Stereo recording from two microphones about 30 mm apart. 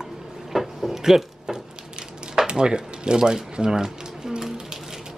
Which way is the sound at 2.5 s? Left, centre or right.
Right.